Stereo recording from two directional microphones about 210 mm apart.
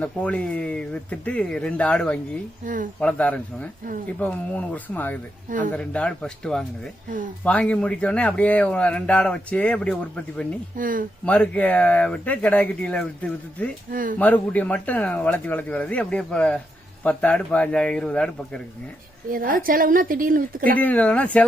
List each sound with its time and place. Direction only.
0.0 s speech: 5° left (ahead or behind)
2.6 s a woman's voice: 35° right (ahead or behind)
3.0 s speech: 5° left (ahead or behind)
5.5 s a woman's voice: 40° right (ahead or behind)
5.7 s speech: 5° left (ahead or behind)
10.8 s a woman's voice: 40° right (ahead or behind)
11.3 s speech: 5° left (ahead or behind)
13.9 s a woman's voice: 40° right (ahead or behind)
14.2 s speech: 5° left (ahead or behind)
19.3 s a woman's voice: 40° right (ahead or behind)
20.7 s speech: 5° left (ahead or behind)